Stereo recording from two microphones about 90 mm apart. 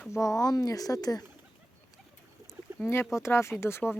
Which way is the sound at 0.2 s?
40° left (ahead or behind).